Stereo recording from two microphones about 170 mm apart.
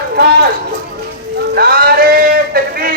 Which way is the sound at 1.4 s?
65° right (ahead or behind).